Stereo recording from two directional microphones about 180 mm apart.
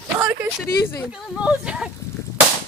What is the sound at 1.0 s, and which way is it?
Speech, 5° right (ahead or behind).